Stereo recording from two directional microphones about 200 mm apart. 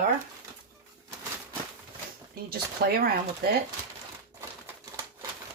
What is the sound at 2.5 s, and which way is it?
Speech, 50° right (ahead or behind).